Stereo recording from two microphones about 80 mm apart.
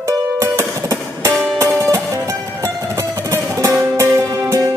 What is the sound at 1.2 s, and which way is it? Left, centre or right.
Music, right.